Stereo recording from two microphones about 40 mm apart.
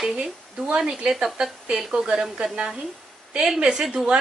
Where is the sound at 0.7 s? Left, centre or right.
Right.